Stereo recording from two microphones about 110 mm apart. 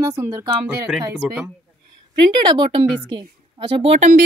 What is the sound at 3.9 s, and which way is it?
Speech, 90° right.